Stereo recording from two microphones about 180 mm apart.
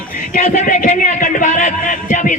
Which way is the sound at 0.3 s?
45° left (ahead or behind).